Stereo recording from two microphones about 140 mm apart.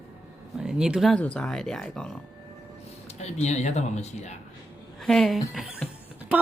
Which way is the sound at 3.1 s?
50° left (ahead or behind).